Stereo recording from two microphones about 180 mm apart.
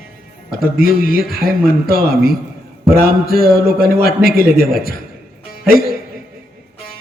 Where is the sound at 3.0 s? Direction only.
55° left (ahead or behind).